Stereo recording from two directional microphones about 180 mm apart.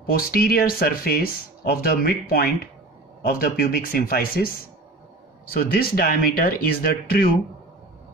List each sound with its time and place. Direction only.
0.1 s speech: 55° left (ahead or behind)